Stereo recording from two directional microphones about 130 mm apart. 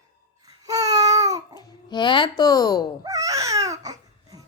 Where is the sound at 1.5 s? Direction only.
35° left (ahead or behind).